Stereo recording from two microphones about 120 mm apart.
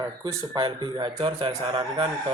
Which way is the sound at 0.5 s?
40° right (ahead or behind).